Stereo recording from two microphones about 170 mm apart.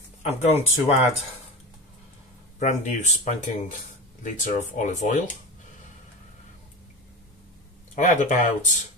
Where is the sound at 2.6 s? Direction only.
45° left (ahead or behind).